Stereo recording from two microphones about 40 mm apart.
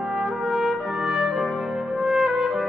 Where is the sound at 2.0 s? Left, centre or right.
Centre.